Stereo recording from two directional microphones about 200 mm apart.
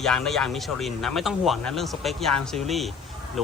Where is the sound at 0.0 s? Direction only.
Centre (ahead or behind).